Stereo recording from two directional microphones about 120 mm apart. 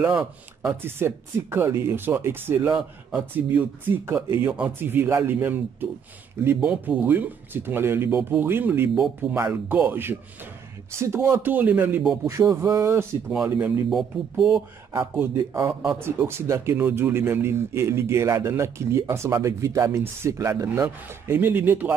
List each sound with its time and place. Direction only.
0.0 s speech: 5° right (ahead or behind)
0.6 s speech: 25° right (ahead or behind)
12.3 s speech: 25° right (ahead or behind)
13.3 s speech: 5° right (ahead or behind)
15.3 s speech: 25° right (ahead or behind)